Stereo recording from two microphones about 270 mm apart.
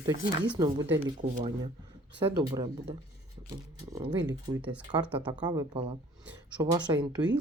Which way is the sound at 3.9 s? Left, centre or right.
Centre.